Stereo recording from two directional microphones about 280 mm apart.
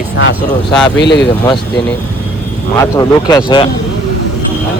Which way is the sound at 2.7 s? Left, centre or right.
Centre.